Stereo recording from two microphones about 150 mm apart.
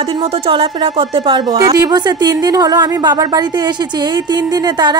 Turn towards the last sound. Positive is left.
turn(degrees=-30)  # may be behind; listen again after turning